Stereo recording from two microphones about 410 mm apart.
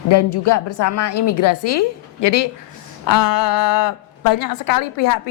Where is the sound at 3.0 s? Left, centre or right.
Left.